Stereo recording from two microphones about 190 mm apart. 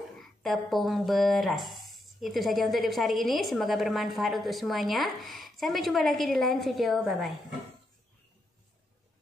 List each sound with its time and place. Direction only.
0.2 s speech: centre (ahead or behind)